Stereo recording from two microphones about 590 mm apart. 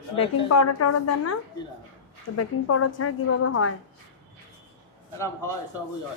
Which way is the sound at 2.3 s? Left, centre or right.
Left.